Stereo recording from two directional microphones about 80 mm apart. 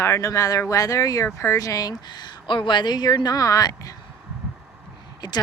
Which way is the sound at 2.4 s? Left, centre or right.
Left.